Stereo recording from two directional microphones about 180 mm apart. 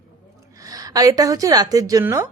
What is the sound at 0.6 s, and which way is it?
Speech, 20° right (ahead or behind).